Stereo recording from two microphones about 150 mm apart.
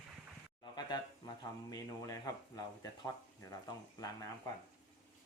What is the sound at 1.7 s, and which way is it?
Speech, 25° left (ahead or behind).